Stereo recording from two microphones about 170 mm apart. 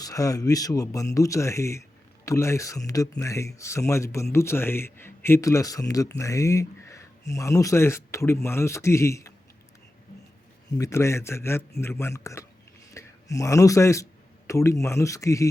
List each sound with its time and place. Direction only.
0.0 s speech: 20° left (ahead or behind)
10.7 s speech: 20° left (ahead or behind)